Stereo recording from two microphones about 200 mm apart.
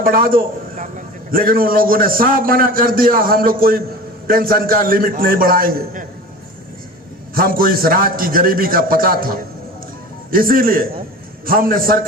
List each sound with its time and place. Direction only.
0.0 s a man's voice: 45° right (ahead or behind)
7.3 s a man's voice: 45° right (ahead or behind)